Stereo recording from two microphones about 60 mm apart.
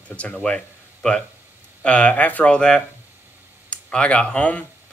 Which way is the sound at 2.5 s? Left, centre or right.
Centre.